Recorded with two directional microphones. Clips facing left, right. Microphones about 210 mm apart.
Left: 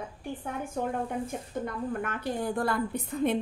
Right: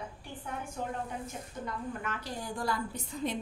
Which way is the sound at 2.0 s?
55° left (ahead or behind).